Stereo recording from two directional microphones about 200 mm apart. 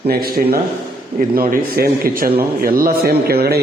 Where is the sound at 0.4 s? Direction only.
40° right (ahead or behind).